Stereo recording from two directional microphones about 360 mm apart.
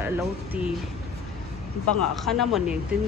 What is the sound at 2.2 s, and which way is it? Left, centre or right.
Speech, centre.